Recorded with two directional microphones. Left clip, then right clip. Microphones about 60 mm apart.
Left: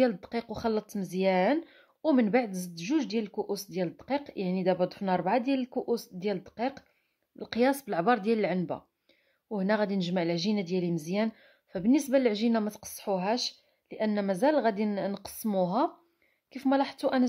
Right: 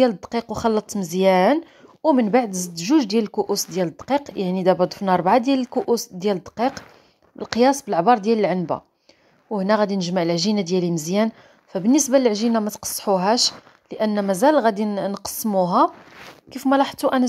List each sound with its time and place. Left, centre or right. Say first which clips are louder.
0.1 s a woman's voice: right 9 dB; right
2.0 s a woman's voice: right 8 dB; centre
2.3 s speech: right 9 dB; right
2.7 s a woman's voice: right 12 dB; right
3.3 s speech: right 10 dB; right
7.7 s speech: right 10 dB; centre
8.7 s a woman's voice: right 11 dB; right
10.1 s a woman's voice: right 9 dB; right
11.9 s speech: right 8 dB; right
12.3 s a woman's voice: right 8 dB; right
12.6 s a woman's voice: right 11 dB; right